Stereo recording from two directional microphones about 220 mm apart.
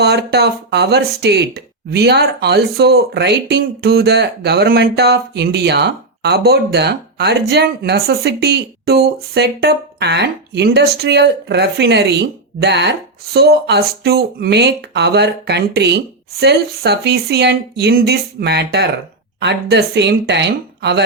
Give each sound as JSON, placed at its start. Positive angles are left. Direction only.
{"t": 0.0, "sound": "speech", "side_deg": -50}